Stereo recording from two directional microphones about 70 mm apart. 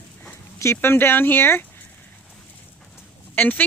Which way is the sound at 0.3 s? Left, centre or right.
Left.